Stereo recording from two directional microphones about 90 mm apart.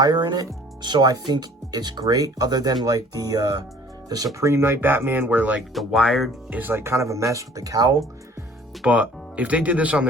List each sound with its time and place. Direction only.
0.0 s speech: 50° right (ahead or behind)
4.4 s speech: 30° right (ahead or behind)
5.5 s speech: centre (ahead or behind)
6.5 s speech: 25° right (ahead or behind); by 7.9 s 40° right (ahead or behind)
8.8 s speech: 15° right (ahead or behind)